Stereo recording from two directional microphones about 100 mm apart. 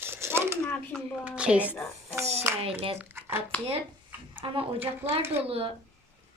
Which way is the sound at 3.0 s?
20° right (ahead or behind).